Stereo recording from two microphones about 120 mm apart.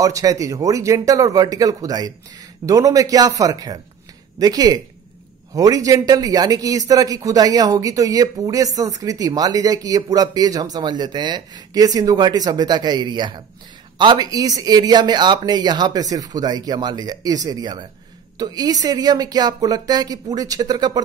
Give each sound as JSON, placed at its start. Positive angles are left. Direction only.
{"t": 0.0, "sound": "speech", "side_deg": -30}